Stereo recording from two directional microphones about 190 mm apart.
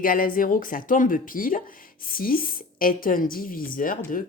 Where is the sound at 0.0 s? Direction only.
50° left (ahead or behind).